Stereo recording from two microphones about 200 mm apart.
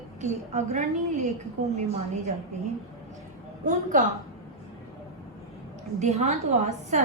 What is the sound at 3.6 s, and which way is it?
Speech, 40° right (ahead or behind).